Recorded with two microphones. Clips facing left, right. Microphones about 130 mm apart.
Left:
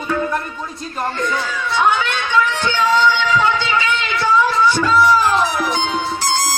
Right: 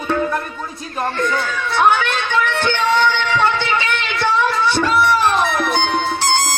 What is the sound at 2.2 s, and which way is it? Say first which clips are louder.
Music: left 2 dB; 65° right (ahead or behind).